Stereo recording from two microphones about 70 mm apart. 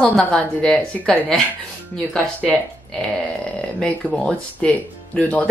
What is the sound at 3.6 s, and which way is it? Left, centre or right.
Speech, centre.